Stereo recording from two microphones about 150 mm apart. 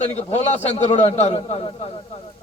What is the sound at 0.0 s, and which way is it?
A man's voice, 50° left (ahead or behind).